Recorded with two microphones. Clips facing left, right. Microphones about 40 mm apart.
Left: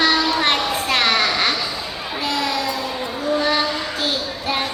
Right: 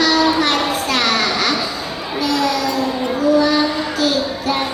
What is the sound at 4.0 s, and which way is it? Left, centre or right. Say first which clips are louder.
Music: right 6 dB; left.